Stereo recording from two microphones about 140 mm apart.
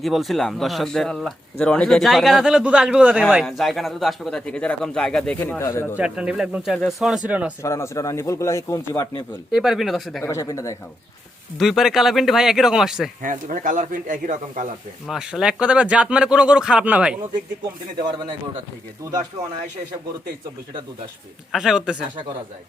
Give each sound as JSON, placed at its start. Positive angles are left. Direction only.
{"t": 0.0, "sound": "speech", "side_deg": 0}
{"t": 6.0, "sound": "speech", "side_deg": -5}
{"t": 7.6, "sound": "a man's voice", "side_deg": 20}
{"t": 9.5, "sound": "speech", "side_deg": 0}
{"t": 10.2, "sound": "a man's voice", "side_deg": 20}
{"t": 11.5, "sound": "speech", "side_deg": 0}
{"t": 13.2, "sound": "speech", "side_deg": -70}
{"t": 15.0, "sound": "speech", "side_deg": -5}
{"t": 21.5, "sound": "speech", "side_deg": 0}